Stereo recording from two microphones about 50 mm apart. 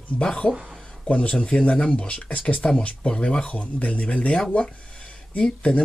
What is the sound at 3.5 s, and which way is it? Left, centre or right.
Speech, left.